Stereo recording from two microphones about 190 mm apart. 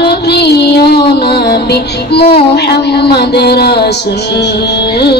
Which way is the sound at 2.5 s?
60° left (ahead or behind).